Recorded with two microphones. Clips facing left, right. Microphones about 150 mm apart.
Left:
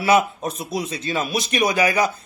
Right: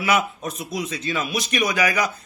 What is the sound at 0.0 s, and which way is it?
A man's voice, 30° left (ahead or behind).